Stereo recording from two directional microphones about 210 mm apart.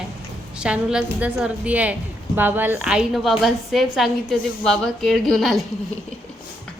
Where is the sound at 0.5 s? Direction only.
5° right (ahead or behind).